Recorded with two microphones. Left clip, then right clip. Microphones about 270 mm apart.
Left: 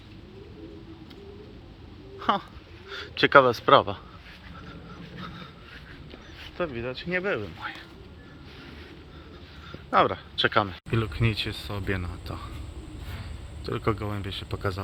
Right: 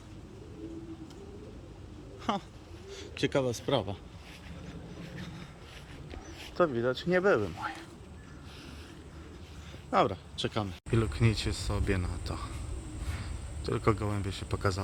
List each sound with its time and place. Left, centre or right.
2.1 s a sound: centre
2.9 s speech: centre
5.1 s a sound: centre
6.6 s speech: right
9.9 s speech: centre
13.7 s speech: centre